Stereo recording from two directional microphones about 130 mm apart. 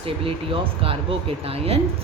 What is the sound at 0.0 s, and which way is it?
A woman's voice, 45° right (ahead or behind).